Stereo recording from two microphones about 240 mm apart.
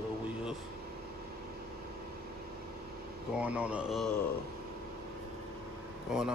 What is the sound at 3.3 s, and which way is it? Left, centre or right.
Mantra, centre.